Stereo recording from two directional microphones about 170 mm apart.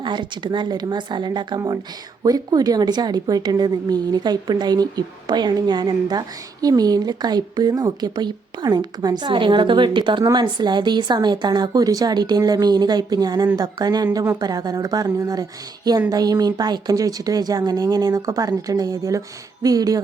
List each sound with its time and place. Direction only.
0.0 s a woman's voice: 25° right (ahead or behind)